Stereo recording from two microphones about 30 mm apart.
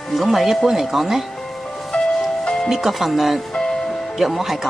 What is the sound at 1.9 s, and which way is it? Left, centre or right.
Music, centre.